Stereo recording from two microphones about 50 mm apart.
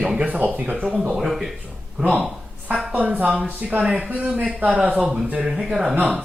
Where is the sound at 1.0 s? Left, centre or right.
Centre.